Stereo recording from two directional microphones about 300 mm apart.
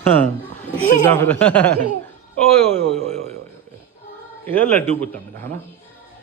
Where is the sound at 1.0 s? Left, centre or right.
Centre.